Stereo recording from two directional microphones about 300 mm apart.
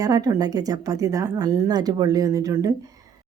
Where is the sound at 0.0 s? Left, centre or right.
Centre.